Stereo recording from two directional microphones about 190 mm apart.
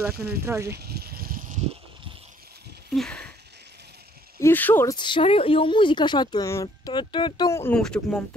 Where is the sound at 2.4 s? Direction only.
55° right (ahead or behind).